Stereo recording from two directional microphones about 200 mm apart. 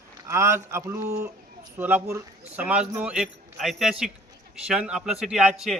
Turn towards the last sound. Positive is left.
turn(degrees=0)  # may be behind; listen again after turning